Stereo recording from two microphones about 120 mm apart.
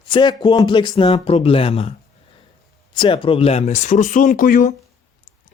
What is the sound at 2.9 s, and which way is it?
Speech, 45° left (ahead or behind).